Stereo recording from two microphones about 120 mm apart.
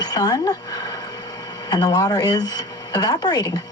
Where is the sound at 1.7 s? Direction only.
35° left (ahead or behind).